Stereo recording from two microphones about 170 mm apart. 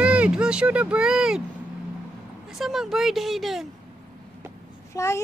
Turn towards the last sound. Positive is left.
turn(degrees=20)  # may be behind; listen again after turning